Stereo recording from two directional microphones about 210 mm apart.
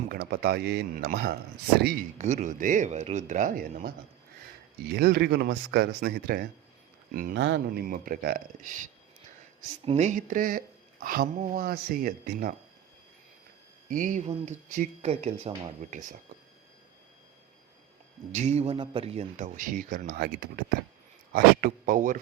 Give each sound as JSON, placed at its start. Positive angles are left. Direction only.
{"t": 0.1, "sound": "speech", "side_deg": -45}
{"t": 2.1, "sound": "speech", "side_deg": -35}
{"t": 9.6, "sound": "speech", "side_deg": -30}
{"t": 13.9, "sound": "speech", "side_deg": -40}
{"t": 18.3, "sound": "speech", "side_deg": -30}